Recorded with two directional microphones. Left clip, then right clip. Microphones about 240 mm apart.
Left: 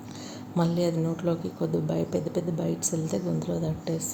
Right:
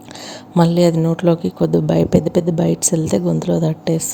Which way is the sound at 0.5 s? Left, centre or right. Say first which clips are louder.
Right 12 dB; right.